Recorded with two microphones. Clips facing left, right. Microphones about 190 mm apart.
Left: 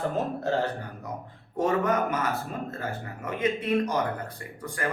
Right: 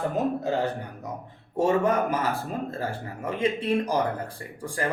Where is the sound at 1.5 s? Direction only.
30° right (ahead or behind).